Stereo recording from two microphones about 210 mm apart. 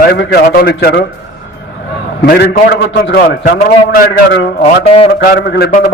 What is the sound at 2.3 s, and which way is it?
A man's voice, 50° left (ahead or behind).